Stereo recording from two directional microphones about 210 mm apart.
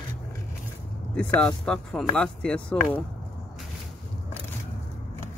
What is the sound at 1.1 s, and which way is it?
Speech, 5° left (ahead or behind).